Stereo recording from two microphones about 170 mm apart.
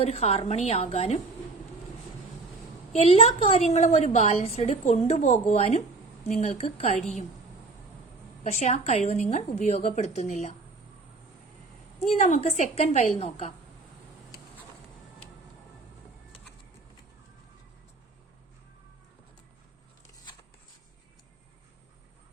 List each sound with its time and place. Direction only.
0.0 s a woman's voice: 40° left (ahead or behind)
2.9 s a woman's voice: 35° left (ahead or behind)
8.4 s a woman's voice: 45° left (ahead or behind)
12.2 s a woman's voice: 40° left (ahead or behind)